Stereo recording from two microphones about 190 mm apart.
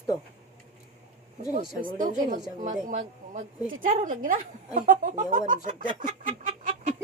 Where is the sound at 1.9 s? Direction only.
45° right (ahead or behind).